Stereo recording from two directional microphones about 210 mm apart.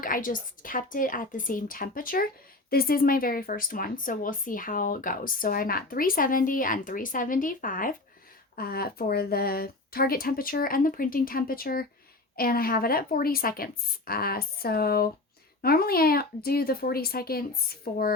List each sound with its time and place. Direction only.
0.0 s speech: 40° left (ahead or behind)